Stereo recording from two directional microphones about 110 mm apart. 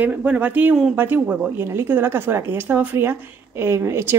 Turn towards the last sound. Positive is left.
turn(degrees=-25)  # may be behind; listen again after turning